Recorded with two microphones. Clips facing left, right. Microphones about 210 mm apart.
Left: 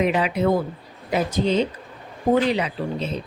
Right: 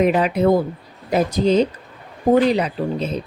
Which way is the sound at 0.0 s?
45° right (ahead or behind).